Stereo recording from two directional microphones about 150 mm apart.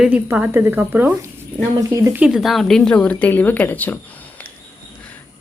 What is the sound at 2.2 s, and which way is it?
A woman's voice, 5° right (ahead or behind).